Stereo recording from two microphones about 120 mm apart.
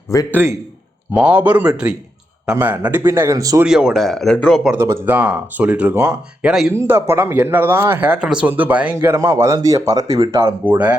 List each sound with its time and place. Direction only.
0.1 s a man's voice: 25° left (ahead or behind)
1.1 s speech: 10° right (ahead or behind); by 3.6 s 25° right (ahead or behind)
3.7 s speech: 5° right (ahead or behind)
4.8 s speech: 20° right (ahead or behind)
6.4 s speech: 5° right (ahead or behind)
6.7 s speech: 20° right (ahead or behind)
9.0 s speech: 25° right (ahead or behind)